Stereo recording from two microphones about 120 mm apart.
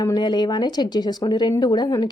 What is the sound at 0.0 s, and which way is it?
Speech, 35° left (ahead or behind).